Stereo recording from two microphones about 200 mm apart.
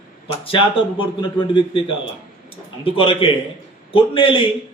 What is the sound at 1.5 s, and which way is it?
A man's voice, 25° left (ahead or behind).